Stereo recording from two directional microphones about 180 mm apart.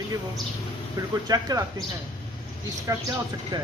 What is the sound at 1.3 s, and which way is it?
Speech, 20° right (ahead or behind).